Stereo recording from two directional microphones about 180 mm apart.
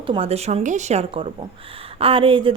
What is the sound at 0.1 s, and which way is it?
A woman's voice, 35° right (ahead or behind).